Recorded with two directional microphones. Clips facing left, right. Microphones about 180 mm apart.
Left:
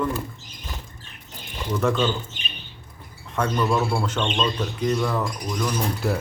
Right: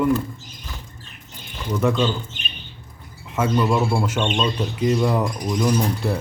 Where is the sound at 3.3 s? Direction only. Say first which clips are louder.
Right 3 dB; 5° right (ahead or behind); by 5.7 s 25° right (ahead or behind).